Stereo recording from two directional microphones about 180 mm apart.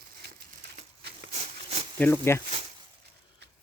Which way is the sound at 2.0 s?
15° left (ahead or behind).